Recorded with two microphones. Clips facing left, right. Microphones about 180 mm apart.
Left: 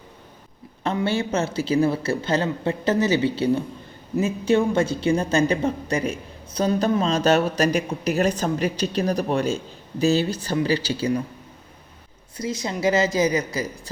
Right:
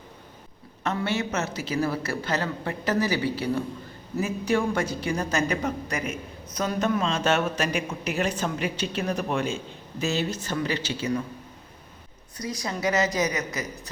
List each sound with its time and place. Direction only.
1.0 s a woman's voice: 30° left (ahead or behind)
12.4 s speech: 25° left (ahead or behind)